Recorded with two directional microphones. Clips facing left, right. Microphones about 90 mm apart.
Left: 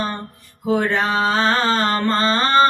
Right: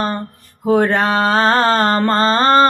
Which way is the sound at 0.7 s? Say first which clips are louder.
Right 5 dB; 50° right (ahead or behind).